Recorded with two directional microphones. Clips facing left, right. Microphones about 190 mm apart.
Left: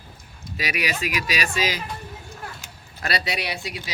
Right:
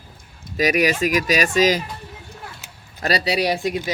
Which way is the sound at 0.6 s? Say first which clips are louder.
Right 9 dB; 45° right (ahead or behind).